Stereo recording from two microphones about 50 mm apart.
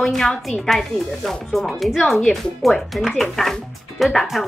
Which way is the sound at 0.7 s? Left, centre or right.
Centre.